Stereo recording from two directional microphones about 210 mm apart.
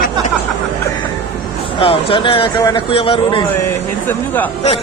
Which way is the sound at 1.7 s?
25° left (ahead or behind).